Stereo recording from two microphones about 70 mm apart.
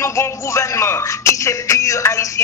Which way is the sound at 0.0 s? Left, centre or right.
Left.